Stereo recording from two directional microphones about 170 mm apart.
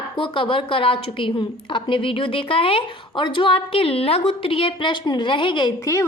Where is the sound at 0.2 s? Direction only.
30° left (ahead or behind).